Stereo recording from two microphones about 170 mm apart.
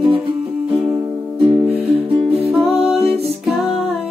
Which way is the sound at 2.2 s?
35° right (ahead or behind).